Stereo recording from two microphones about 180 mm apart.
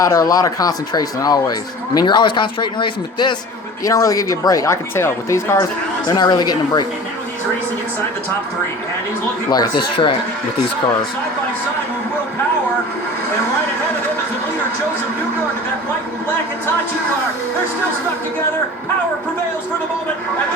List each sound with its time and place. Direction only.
0.0 s speech: 20° left (ahead or behind)
9.5 s speech: 25° left (ahead or behind)